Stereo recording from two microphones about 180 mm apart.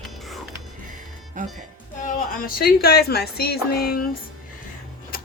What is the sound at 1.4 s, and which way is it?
Speech, 45° right (ahead or behind).